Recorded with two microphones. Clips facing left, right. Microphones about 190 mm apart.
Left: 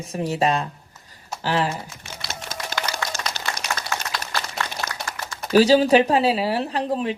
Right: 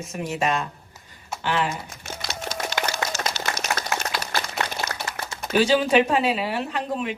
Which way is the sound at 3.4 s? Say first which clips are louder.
Right 2 dB; 50° left (ahead or behind).